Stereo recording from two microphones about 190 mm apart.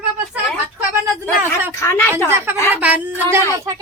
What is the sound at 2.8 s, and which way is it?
Speech, 10° right (ahead or behind).